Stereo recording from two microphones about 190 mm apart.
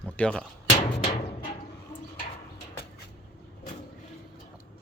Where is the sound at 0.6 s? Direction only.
35° left (ahead or behind).